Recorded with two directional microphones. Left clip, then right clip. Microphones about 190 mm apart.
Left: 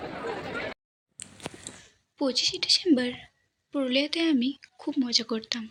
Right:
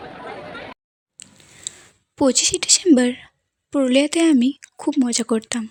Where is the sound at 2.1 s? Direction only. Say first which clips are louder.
Right 8 dB; 60° right (ahead or behind).